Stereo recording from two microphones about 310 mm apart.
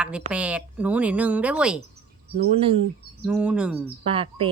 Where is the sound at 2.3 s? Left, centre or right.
Centre.